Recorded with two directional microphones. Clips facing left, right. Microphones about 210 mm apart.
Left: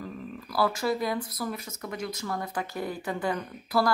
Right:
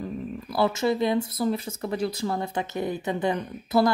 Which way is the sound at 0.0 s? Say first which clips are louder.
Right 6 dB; 25° right (ahead or behind).